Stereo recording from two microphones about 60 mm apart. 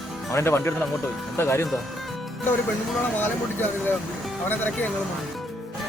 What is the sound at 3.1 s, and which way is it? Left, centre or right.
Speech, left.